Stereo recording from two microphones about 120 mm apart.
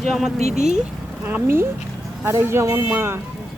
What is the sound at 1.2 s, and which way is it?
Speech, 15° right (ahead or behind).